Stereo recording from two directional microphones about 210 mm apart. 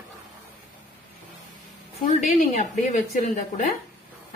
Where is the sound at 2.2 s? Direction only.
35° left (ahead or behind).